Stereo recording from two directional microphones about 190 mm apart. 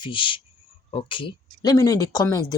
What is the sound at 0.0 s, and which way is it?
Speech, 25° left (ahead or behind).